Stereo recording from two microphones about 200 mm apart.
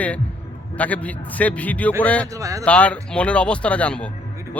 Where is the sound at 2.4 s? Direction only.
15° right (ahead or behind).